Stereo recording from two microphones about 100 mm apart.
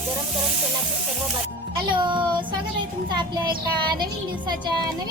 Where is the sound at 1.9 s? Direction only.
55° right (ahead or behind).